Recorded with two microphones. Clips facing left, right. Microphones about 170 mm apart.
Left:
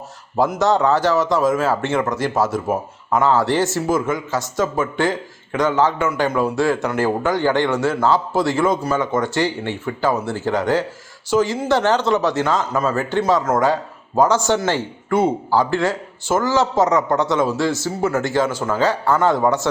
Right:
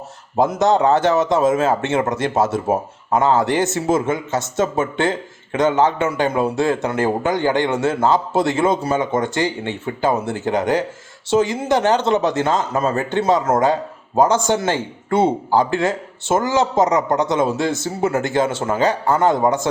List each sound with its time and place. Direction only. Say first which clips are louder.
0.3 s speech: right 1 dB; 20° right (ahead or behind)